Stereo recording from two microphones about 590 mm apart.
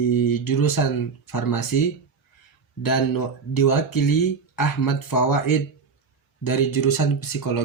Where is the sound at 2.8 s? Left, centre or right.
Left.